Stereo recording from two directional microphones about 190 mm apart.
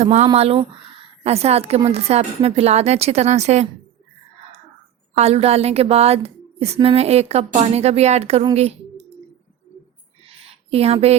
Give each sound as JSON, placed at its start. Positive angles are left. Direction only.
{"t": 0.0, "sound": "a woman's voice", "side_deg": -35}
{"t": 5.1, "sound": "a woman's voice", "side_deg": -35}
{"t": 10.5, "sound": "speech", "side_deg": -30}